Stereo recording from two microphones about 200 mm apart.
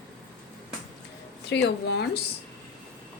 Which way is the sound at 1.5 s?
60° left (ahead or behind).